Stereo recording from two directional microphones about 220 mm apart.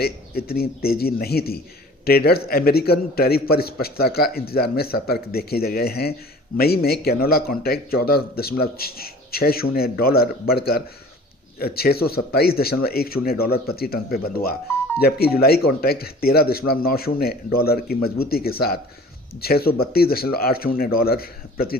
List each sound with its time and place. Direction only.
0.0 s a man's voice: 45° left (ahead or behind)
11.6 s a man's voice: 45° left (ahead or behind)